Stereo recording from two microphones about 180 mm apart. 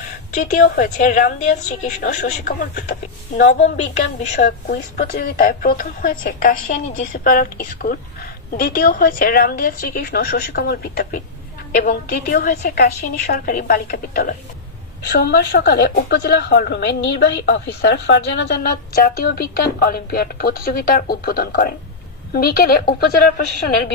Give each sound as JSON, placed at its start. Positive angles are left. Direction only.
{"t": 0.3, "sound": "a woman's voice", "side_deg": 45}
{"t": 5.1, "sound": "a woman's voice", "side_deg": 55}